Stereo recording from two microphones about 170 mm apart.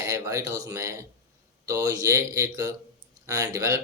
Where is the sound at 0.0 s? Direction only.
15° right (ahead or behind).